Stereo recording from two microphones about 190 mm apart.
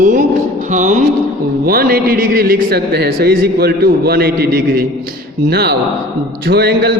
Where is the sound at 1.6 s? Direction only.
50° right (ahead or behind).